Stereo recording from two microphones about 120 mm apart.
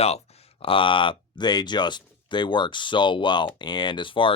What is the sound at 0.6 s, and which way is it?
Speech, 50° left (ahead or behind).